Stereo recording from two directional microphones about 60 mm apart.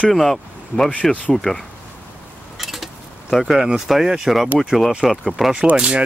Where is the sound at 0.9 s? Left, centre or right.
Left.